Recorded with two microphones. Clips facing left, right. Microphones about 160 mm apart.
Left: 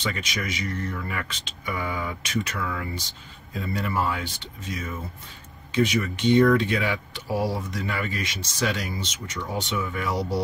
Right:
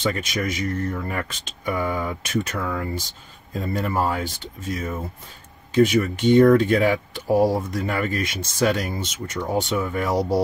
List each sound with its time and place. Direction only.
0.0 s speech: 45° right (ahead or behind)